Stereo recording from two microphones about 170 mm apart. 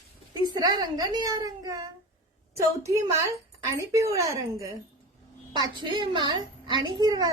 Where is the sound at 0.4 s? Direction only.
25° right (ahead or behind).